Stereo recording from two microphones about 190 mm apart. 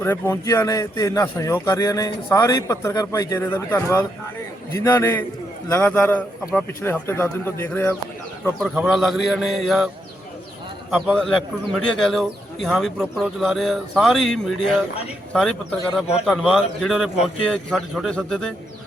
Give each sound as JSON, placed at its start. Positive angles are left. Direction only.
{"t": 0.0, "sound": "speech", "side_deg": 10}
{"t": 8.7, "sound": "a man's voice", "side_deg": -5}
{"t": 10.9, "sound": "a man's voice", "side_deg": 0}